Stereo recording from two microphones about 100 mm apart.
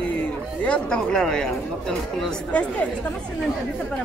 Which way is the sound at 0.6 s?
10° left (ahead or behind).